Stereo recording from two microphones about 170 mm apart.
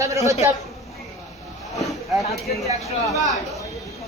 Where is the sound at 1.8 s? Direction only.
Centre (ahead or behind).